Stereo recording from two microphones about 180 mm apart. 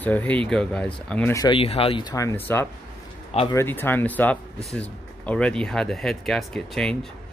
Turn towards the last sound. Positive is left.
turn(degrees=5)  # may be behind; listen again after turning